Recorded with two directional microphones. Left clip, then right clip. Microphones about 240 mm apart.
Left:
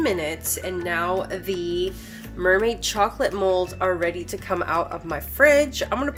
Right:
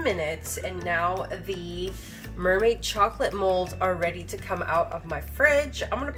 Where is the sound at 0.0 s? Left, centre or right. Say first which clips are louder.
Left 3 dB; left.